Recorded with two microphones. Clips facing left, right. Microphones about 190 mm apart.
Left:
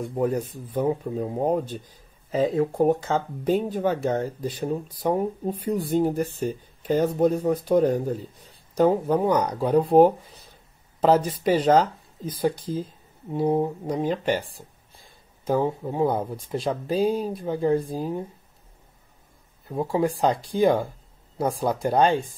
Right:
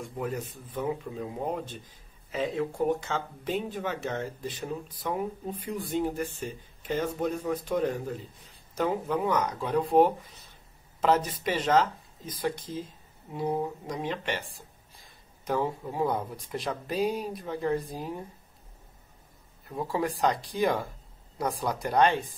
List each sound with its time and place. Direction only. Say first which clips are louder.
0.0 s speech: left 9 dB; 40° left (ahead or behind)
2.7 s speech: left 7 dB; 50° left (ahead or behind)
3.1 s speech: left 8 dB; 40° left (ahead or behind)
15.4 s speech: left 6 dB; 25° left (ahead or behind)
19.7 s speech: left 6 dB; 25° left (ahead or behind)